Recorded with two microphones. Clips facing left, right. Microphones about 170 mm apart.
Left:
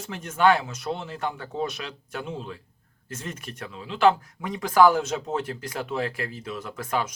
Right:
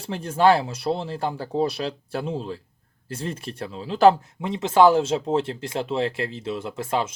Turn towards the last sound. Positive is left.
turn(degrees=-25)  # may be behind; listen again after turning